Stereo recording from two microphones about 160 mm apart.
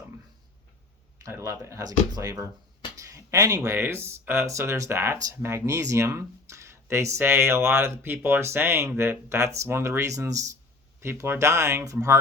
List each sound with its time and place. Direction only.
1.2 s speech: 20° right (ahead or behind)